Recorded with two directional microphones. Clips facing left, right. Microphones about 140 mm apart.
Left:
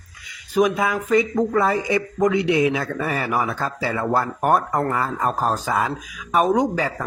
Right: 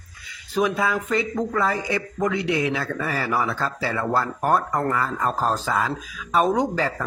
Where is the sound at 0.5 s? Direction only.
15° left (ahead or behind).